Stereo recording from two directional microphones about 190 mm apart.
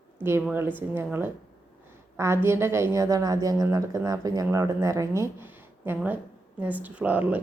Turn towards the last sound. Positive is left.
turn(degrees=-10)  # may be behind; listen again after turning